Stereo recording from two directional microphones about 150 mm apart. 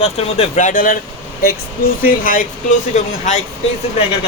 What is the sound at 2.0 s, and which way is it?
Speech, 65° left (ahead or behind).